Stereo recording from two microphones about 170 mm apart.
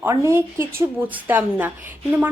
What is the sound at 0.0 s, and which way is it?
A woman's voice, 15° right (ahead or behind).